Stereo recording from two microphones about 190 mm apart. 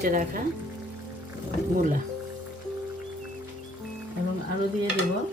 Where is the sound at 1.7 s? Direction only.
45° right (ahead or behind).